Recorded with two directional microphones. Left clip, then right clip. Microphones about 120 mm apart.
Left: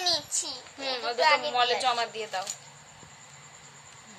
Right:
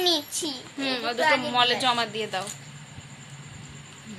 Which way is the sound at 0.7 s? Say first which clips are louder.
Right 2 dB; centre (ahead or behind).